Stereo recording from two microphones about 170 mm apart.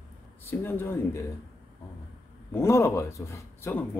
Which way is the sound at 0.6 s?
15° left (ahead or behind).